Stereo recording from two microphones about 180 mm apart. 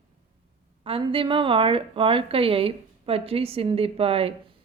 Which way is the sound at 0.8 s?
30° right (ahead or behind).